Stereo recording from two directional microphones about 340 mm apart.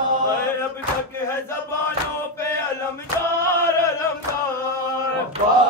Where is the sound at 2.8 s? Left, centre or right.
Centre.